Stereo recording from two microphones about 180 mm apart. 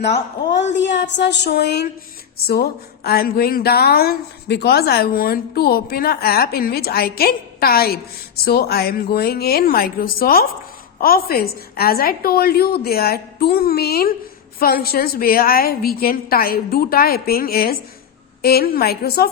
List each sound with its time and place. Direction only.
0.1 s speech: 40° left (ahead or behind)
0.8 s a sound: 80° left
2.4 s speech: 60° left (ahead or behind)